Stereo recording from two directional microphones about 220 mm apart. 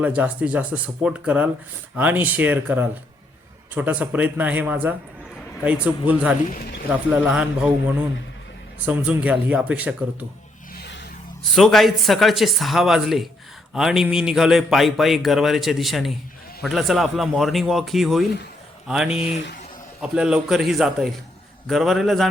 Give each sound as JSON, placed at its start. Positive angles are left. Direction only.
{"t": 0.0, "sound": "a man's voice", "side_deg": -5}
{"t": 10.8, "sound": "a sound", "side_deg": 50}
{"t": 11.5, "sound": "a man's voice", "side_deg": 0}